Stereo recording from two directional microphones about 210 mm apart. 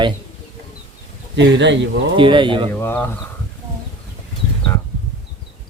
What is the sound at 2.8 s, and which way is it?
Speech, 10° left (ahead or behind).